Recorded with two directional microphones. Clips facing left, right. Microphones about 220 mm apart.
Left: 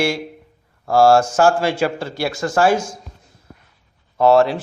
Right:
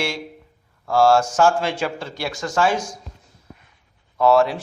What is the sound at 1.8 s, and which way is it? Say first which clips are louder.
Speech: left 5 dB; 50° left (ahead or behind).